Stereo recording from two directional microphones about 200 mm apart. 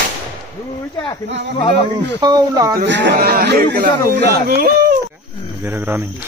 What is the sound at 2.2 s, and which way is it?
Speech, 20° right (ahead or behind).